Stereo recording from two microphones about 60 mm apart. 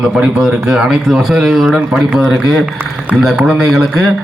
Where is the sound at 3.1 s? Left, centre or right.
Right.